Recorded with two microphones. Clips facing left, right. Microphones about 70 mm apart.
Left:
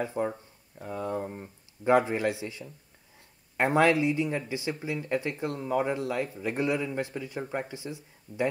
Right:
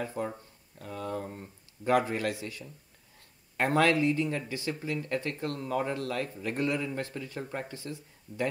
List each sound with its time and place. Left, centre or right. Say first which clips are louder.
0.0 s speech: left 4 dB; centre